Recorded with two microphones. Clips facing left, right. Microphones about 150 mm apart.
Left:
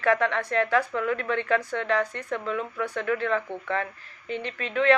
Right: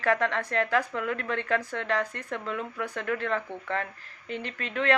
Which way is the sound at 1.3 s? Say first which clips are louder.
Left 3 dB; 35° right (ahead or behind).